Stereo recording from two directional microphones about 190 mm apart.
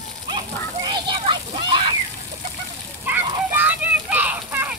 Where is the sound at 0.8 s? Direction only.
25° right (ahead or behind).